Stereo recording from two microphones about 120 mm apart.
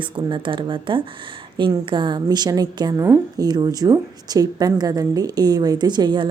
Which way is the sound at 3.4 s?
35° right (ahead or behind).